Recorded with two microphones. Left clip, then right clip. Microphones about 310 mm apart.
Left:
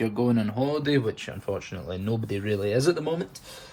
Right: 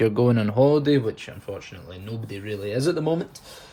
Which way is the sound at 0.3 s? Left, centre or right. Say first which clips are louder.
Right 8 dB; right.